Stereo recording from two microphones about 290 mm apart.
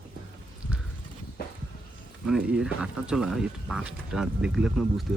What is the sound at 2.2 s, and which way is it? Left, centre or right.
Speech, centre.